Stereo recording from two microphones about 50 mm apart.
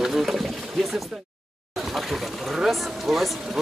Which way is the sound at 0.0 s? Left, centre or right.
Centre.